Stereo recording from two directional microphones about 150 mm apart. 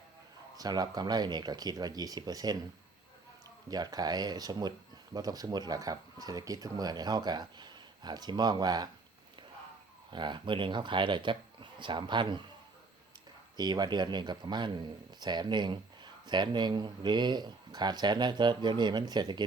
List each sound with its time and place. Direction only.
0.5 s speech: 25° right (ahead or behind)
3.7 s speech: 25° right (ahead or behind)
10.1 s speech: 30° right (ahead or behind)
13.6 s speech: 30° right (ahead or behind)